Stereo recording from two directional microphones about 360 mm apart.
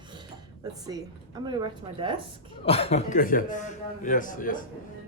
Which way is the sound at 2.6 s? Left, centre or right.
Centre.